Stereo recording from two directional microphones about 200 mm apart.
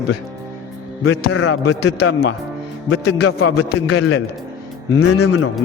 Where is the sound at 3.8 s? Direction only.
90° left.